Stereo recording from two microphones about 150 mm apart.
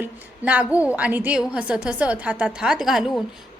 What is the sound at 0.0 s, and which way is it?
A woman's voice, 10° right (ahead or behind).